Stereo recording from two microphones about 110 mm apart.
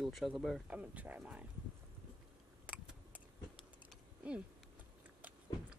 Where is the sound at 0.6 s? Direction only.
15° right (ahead or behind).